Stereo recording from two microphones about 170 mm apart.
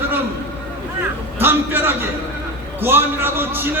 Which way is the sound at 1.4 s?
15° right (ahead or behind).